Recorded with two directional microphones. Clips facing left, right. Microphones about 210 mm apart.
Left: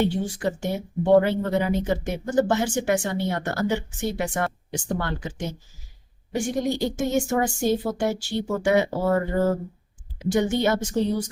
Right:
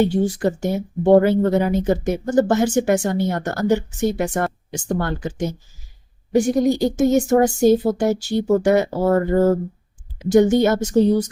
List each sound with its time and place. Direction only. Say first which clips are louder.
0.0 s speech: right 6 dB; 45° right (ahead or behind)